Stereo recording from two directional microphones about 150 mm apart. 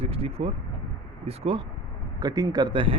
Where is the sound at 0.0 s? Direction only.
40° right (ahead or behind).